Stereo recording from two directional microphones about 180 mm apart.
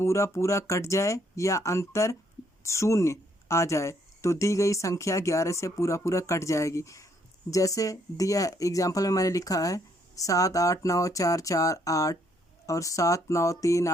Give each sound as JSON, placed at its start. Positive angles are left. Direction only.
{"t": 0.0, "sound": "speech", "side_deg": 15}